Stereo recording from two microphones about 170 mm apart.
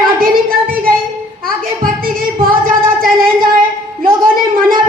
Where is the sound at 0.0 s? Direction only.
55° right (ahead or behind).